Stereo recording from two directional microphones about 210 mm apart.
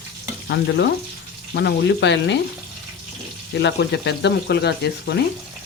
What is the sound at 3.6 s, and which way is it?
Speech, 55° left (ahead or behind).